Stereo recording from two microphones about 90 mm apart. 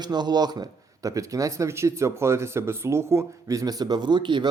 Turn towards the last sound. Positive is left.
turn(degrees=-60)  # may be behind; listen again after turning